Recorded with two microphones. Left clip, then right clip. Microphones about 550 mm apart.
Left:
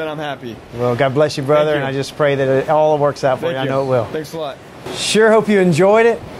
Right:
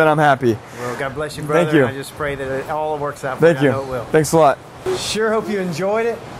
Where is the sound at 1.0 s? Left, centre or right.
Left.